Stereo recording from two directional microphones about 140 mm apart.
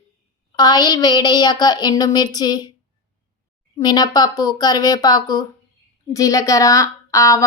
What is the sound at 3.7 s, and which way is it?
A child's voice, 30° left (ahead or behind).